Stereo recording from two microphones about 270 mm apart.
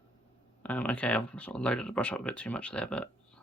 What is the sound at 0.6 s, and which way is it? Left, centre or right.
Speech, centre.